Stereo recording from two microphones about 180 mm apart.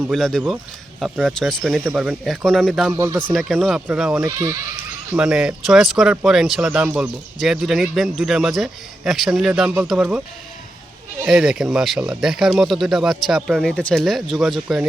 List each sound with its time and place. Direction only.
0.1 s speech: centre (ahead or behind)
2.9 s speech: 15° right (ahead or behind)
3.2 s speech: 5° left (ahead or behind)
4.2 s speech: 20° right (ahead or behind)
5.1 s speech: 5° right (ahead or behind)